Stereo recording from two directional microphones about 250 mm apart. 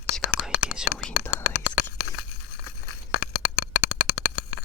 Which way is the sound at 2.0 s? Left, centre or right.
Left.